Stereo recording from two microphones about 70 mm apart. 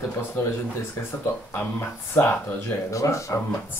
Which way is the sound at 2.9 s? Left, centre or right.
Left.